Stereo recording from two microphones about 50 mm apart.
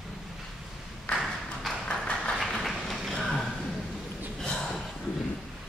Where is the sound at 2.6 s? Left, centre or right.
Centre.